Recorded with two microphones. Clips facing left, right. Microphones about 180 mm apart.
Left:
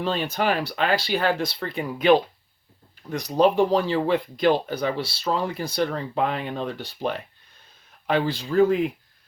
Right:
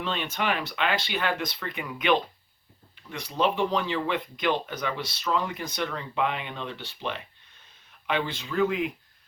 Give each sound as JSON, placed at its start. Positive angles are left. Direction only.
{"t": 0.0, "sound": "speech", "side_deg": 35}